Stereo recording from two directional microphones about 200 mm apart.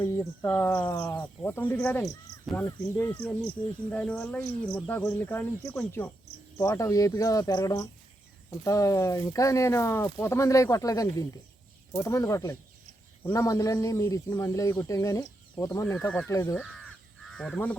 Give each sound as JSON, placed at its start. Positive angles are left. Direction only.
{"t": 0.0, "sound": "speech", "side_deg": 10}
{"t": 17.3, "sound": "speech", "side_deg": 0}